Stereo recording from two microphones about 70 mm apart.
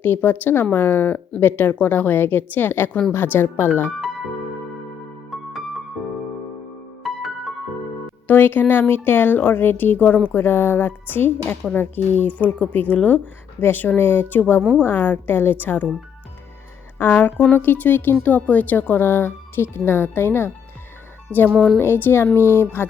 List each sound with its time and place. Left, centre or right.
0.0 s speech: left
5.3 s music: centre
7.0 s music: centre
8.3 s speech: left
17.0 s speech: left